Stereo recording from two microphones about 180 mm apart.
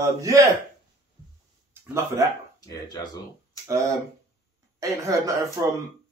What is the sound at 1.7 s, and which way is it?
Speech, 15° right (ahead or behind).